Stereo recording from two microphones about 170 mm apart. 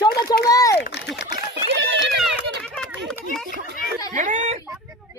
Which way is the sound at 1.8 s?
90° right.